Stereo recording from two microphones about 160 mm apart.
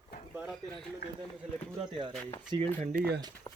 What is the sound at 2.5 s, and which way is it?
Speech, 30° right (ahead or behind).